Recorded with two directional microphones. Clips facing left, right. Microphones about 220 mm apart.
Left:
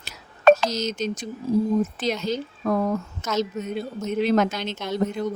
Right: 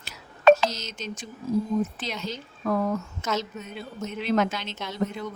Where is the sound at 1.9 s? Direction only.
40° left (ahead or behind).